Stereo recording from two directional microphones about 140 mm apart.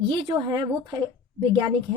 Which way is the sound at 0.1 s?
35° right (ahead or behind).